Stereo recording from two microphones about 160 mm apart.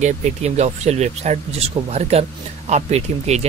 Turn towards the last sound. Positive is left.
turn(degrees=-45)  # may be behind; listen again after turning